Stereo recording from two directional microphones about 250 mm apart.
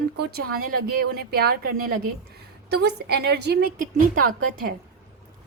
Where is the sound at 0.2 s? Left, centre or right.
Right.